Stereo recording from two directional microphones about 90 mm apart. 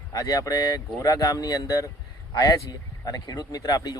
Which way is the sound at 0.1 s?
40° left (ahead or behind).